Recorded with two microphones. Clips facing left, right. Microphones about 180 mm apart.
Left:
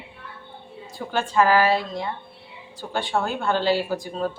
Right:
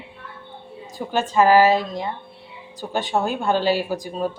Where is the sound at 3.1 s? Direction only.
15° right (ahead or behind).